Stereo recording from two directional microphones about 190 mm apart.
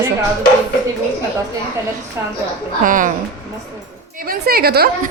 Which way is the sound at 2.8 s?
45° right (ahead or behind).